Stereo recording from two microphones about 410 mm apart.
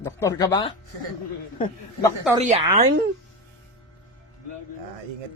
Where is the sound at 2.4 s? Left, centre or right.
Centre.